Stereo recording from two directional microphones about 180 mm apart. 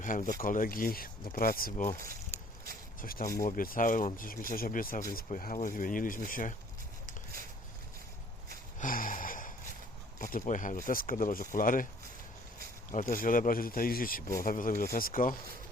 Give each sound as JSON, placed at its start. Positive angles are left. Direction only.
{"t": 0.0, "sound": "speech", "side_deg": 45}
{"t": 3.0, "sound": "speech", "side_deg": 50}
{"t": 8.8, "sound": "a sound", "side_deg": 50}
{"t": 10.2, "sound": "speech", "side_deg": 45}
{"t": 12.9, "sound": "speech", "side_deg": 45}